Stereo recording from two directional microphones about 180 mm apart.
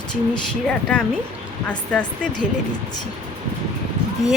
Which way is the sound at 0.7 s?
5° left (ahead or behind).